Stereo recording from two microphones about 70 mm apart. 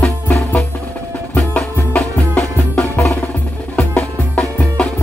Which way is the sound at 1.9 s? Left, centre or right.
Left.